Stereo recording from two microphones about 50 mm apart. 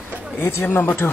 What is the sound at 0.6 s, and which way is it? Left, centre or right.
Speech, left.